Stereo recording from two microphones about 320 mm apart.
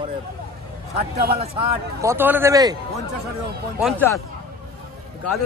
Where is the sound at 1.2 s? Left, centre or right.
Right.